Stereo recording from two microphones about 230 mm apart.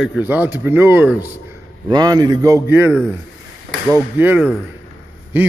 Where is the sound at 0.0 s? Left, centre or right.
Centre.